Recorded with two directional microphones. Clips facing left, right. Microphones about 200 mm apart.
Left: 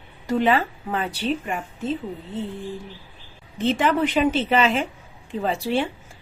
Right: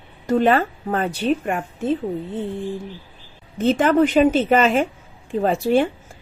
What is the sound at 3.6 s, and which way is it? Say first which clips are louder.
A woman's voice: right 5 dB; 45° right (ahead or behind).